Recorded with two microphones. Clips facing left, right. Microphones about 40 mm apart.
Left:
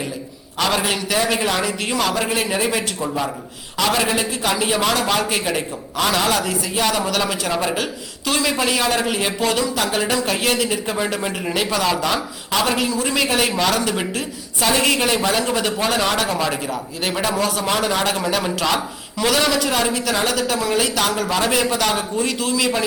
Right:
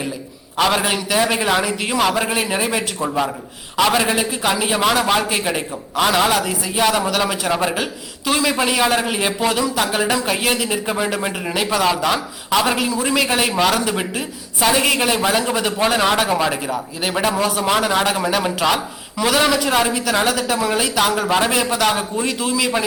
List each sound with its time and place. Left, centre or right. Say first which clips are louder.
0.5 s a man's voice: right 3 dB; centre
21.5 s a man's voice: right 1 dB; centre